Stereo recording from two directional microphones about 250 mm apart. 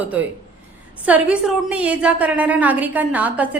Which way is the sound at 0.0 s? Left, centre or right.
Centre.